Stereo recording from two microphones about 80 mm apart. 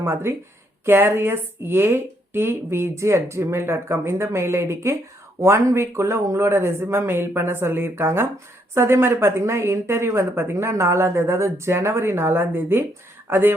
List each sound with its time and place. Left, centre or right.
0.0 s speech: right